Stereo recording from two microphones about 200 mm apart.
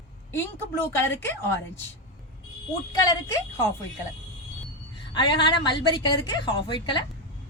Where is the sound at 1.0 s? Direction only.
10° left (ahead or behind).